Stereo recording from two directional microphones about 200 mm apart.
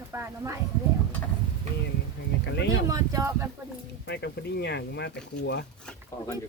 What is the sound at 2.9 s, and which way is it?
Speech, 15° right (ahead or behind).